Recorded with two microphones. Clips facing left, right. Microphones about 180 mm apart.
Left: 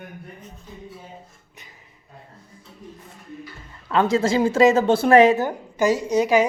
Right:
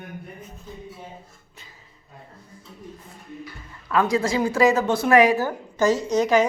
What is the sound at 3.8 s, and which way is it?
A woman's voice, 25° left (ahead or behind).